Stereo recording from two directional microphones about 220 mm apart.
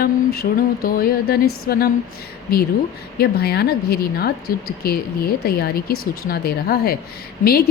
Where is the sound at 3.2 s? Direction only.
45° left (ahead or behind).